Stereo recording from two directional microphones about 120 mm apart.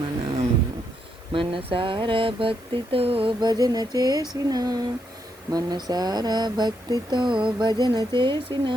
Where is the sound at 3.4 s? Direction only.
35° right (ahead or behind).